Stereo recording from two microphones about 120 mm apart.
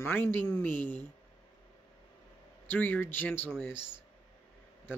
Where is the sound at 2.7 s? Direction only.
15° left (ahead or behind).